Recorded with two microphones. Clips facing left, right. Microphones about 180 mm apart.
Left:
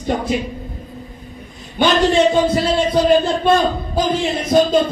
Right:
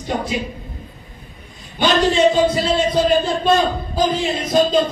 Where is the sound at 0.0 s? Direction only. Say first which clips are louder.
Left 3 dB; 55° left (ahead or behind).